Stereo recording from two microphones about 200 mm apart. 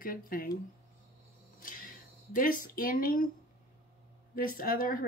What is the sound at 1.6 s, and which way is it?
Speech, 45° left (ahead or behind).